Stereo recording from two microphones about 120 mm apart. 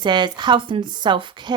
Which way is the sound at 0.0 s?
40° right (ahead or behind).